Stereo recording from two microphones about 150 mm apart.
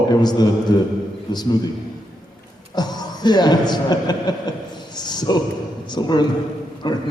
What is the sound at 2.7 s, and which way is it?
A man's voice, 30° left (ahead or behind).